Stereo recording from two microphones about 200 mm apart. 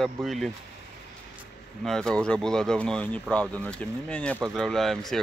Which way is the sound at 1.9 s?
5° left (ahead or behind).